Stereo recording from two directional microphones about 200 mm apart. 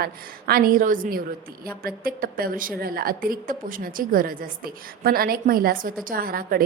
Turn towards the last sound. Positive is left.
turn(degrees=-45)  # may be behind; listen again after turning